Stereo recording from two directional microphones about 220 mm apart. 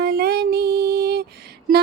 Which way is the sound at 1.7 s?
40° right (ahead or behind).